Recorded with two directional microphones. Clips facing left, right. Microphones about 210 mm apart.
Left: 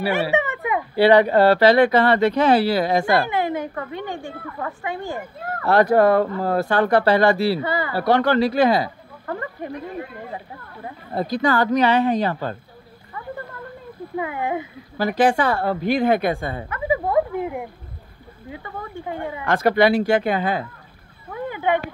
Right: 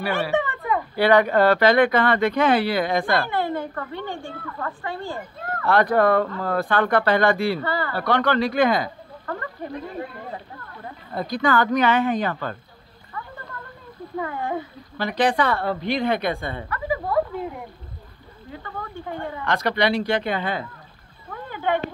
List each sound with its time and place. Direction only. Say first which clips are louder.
0.3 s a sound: left 1 dB; 15° left (ahead or behind)
0.9 s speech: left 3 dB; 30° left (ahead or behind)
3.3 s a woman's voice: left 2 dB; 15° left (ahead or behind)
5.6 s speech: left 3 dB; 40° left (ahead or behind)
7.6 s a woman's voice: left 2 dB; 15° left (ahead or behind)
8.0 s speech: left 4 dB; 35° left (ahead or behind)
11.1 s speech: left 2 dB; 35° left (ahead or behind)
14.1 s a woman's voice: left 2 dB; 15° left (ahead or behind)
15.0 s speech: left 3 dB; 45° left (ahead or behind)
16.6 s a sound: left 4 dB; 20° left (ahead or behind)
18.5 s a woman's voice: left 1 dB; 10° left (ahead or behind)
19.5 s speech: left 5 dB; 50° left (ahead or behind)
21.5 s a sound: left 2 dB; 15° left (ahead or behind)